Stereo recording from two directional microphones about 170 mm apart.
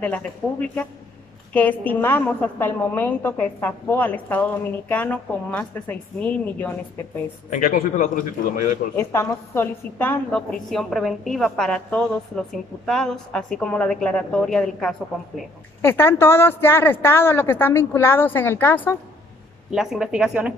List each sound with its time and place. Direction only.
0.0 s a woman's voice: 10° left (ahead or behind)
7.4 s speech: 50° left (ahead or behind)
8.9 s a woman's voice: 15° left (ahead or behind)
19.7 s a woman's voice: 5° right (ahead or behind)